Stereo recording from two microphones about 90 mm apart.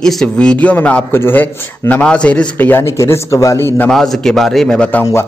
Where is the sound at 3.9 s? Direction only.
5° left (ahead or behind).